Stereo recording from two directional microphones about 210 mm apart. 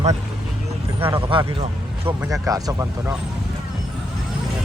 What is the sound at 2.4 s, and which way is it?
Speech, 15° right (ahead or behind).